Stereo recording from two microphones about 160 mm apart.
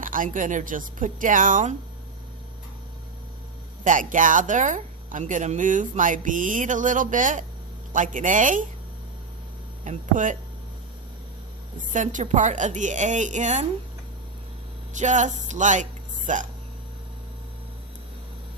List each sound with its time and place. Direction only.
0.0 s speech: 55° right (ahead or behind)
3.8 s speech: 55° right (ahead or behind)
9.8 s speech: 50° right (ahead or behind)
11.9 s speech: 50° right (ahead or behind)
14.9 s speech: 50° right (ahead or behind)